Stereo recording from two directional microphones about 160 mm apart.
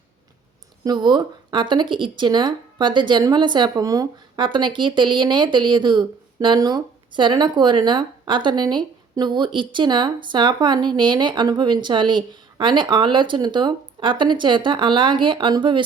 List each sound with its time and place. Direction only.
0.9 s speech: 30° right (ahead or behind)